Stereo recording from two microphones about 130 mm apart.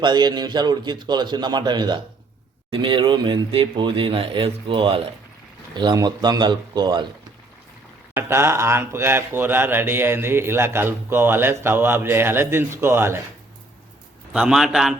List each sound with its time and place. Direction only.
0.0 s speech: 35° right (ahead or behind)
8.1 s speech: 20° right (ahead or behind)
14.3 s a man's voice: 5° right (ahead or behind)